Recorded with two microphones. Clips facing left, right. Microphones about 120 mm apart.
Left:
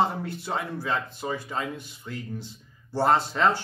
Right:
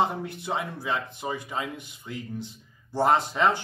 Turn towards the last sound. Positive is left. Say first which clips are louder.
# even
turn(degrees=-15)  # may be behind; listen again after turning